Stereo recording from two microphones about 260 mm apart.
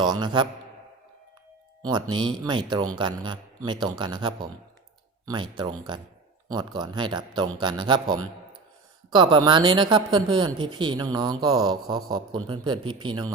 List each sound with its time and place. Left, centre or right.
0.0 s speech: centre
1.9 s speech: centre